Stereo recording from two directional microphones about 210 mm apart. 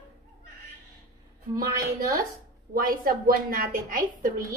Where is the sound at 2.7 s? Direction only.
40° right (ahead or behind).